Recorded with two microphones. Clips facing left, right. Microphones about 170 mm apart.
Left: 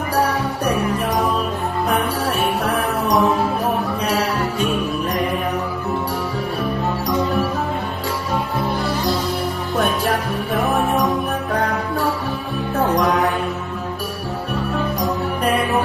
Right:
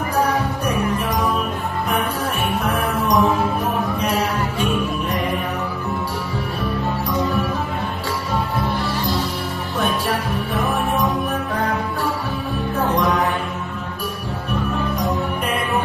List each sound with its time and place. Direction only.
2.6 s music: 35° left (ahead or behind)